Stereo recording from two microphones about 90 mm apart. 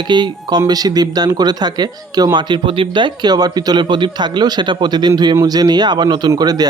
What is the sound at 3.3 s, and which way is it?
Speech, 45° right (ahead or behind).